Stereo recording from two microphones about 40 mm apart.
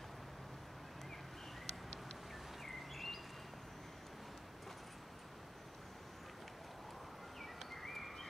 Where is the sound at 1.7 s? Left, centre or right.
Centre.